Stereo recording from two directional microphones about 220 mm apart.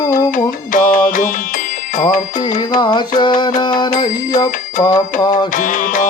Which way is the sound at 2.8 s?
20° left (ahead or behind).